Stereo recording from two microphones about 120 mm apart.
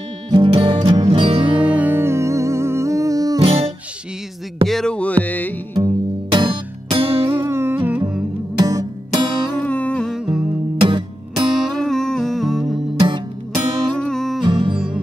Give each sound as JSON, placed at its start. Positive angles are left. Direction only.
{"t": 0.3, "sound": "music", "side_deg": -40}
{"t": 1.4, "sound": "music", "side_deg": -10}
{"t": 3.3, "sound": "music", "side_deg": -50}
{"t": 4.6, "sound": "music", "side_deg": 5}
{"t": 5.8, "sound": "music", "side_deg": -40}
{"t": 7.3, "sound": "music", "side_deg": -20}
{"t": 8.5, "sound": "music", "side_deg": -35}
{"t": 9.6, "sound": "music", "side_deg": 10}
{"t": 10.8, "sound": "music", "side_deg": -40}
{"t": 11.8, "sound": "humming", "side_deg": 5}
{"t": 13.0, "sound": "music", "side_deg": -40}
{"t": 13.9, "sound": "music", "side_deg": 5}
{"t": 14.4, "sound": "music", "side_deg": -40}